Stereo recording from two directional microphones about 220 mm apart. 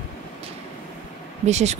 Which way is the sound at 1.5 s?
30° right (ahead or behind).